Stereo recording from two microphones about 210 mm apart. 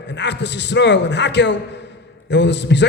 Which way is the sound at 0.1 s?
55° left (ahead or behind).